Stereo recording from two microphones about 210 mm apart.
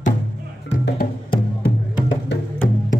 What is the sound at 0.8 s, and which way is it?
Music, 45° left (ahead or behind).